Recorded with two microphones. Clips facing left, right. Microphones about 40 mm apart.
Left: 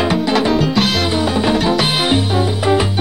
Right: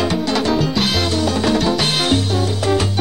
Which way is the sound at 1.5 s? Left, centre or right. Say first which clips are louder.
Left 2 dB; centre.